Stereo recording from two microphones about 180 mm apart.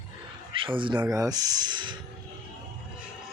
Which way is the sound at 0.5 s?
30° right (ahead or behind).